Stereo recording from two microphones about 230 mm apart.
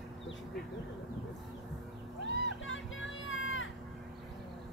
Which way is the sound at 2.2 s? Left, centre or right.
Left.